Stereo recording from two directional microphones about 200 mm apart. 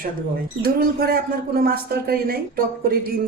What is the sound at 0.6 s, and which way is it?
Speech, 50° right (ahead or behind).